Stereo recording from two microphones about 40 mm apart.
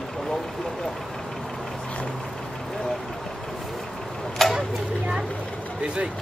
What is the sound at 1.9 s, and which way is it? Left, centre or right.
Vehicle, left.